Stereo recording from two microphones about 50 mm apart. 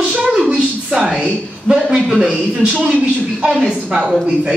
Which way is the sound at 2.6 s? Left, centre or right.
Right.